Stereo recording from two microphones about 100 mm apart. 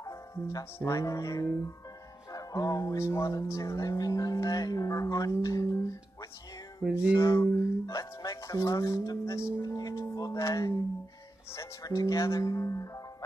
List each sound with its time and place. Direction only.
0.0 s music: 35° left (ahead or behind)
0.8 s speech: 35° left (ahead or behind)
6.8 s music: 10° right (ahead or behind)
7.2 s speech: 30° left (ahead or behind)
9.2 s speech: 25° left (ahead or behind)
9.6 s speech: 40° left (ahead or behind)